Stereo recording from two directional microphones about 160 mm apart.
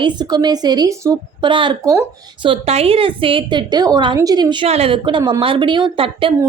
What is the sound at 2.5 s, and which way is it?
A woman's voice, 40° right (ahead or behind).